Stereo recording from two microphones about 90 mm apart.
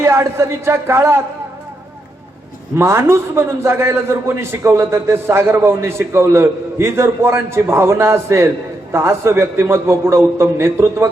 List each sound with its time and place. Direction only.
0.0 s a man's voice: 30° right (ahead or behind)
2.7 s a man's voice: 30° right (ahead or behind)